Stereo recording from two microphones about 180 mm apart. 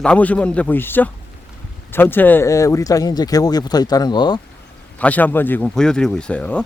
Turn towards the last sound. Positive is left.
turn(degrees=5)  # may be behind; listen again after turning